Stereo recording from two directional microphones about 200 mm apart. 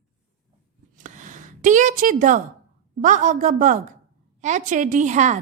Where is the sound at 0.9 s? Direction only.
40° right (ahead or behind).